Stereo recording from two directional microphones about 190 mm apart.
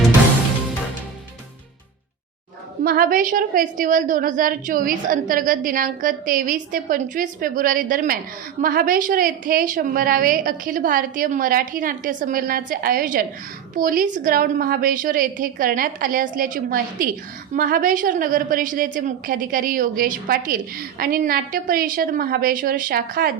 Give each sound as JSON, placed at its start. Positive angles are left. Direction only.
{"t": 2.8, "sound": "a woman's voice", "side_deg": -50}